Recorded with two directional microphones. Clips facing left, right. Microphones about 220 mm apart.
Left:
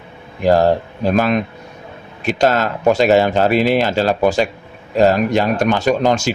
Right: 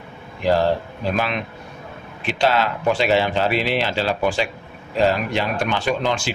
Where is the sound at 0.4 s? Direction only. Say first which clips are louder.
Left 5 dB; 45° left (ahead or behind).